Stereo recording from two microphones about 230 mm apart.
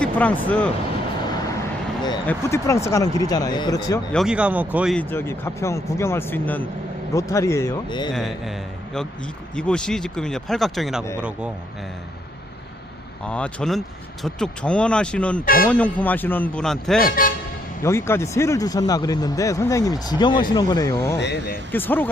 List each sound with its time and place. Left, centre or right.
0.0 s speech: centre
2.2 s speech: centre
4.1 s speech: centre
8.1 s speech: centre
13.2 s speech: centre
15.4 s speech: left
15.7 s speech: centre
17.0 s speech: left
17.8 s speech: centre
21.2 s speech: left
21.7 s speech: centre